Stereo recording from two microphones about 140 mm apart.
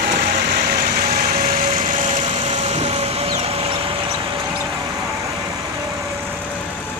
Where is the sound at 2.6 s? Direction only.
50° right (ahead or behind).